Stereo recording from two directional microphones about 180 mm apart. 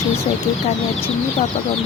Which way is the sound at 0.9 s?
35° left (ahead or behind).